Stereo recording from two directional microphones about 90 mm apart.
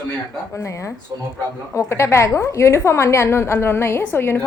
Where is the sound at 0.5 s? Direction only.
35° left (ahead or behind).